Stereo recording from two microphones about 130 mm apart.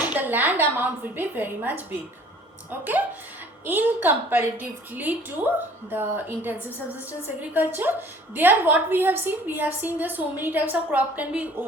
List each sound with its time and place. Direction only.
0.0 s a woman's voice: 15° right (ahead or behind)
3.7 s a woman's voice: 15° right (ahead or behind)
6.7 s a woman's voice: 15° left (ahead or behind)
7.5 s a woman's voice: 15° right (ahead or behind)